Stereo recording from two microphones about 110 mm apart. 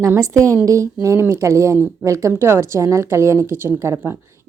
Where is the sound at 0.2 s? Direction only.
30° right (ahead or behind).